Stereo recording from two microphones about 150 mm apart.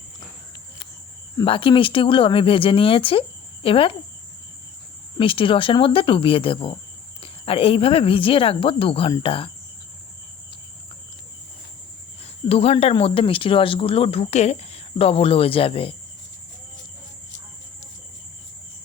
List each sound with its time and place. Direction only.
1.5 s speech: 35° left (ahead or behind)
5.1 s speech: 35° left (ahead or behind)
12.2 s speech: 40° left (ahead or behind)